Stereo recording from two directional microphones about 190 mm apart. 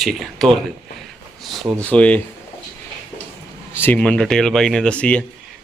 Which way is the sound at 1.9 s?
5° left (ahead or behind).